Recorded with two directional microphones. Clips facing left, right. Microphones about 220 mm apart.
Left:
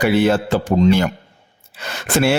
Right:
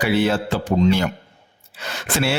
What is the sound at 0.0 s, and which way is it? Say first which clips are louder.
A man's voice: left 4 dB; 45° left (ahead or behind).